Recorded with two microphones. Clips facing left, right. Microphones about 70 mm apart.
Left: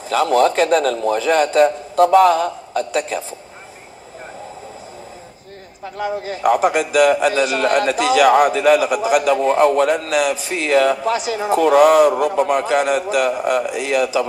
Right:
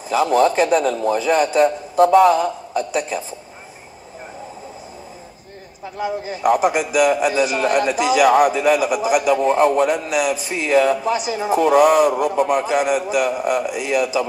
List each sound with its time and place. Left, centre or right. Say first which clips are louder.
0.1 s a man's voice: left 1 dB; centre
5.9 s a man's voice: left 1 dB; centre